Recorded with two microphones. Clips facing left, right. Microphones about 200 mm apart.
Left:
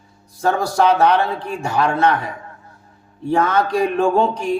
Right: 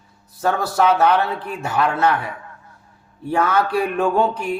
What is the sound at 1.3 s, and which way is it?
Speech, 30° left (ahead or behind).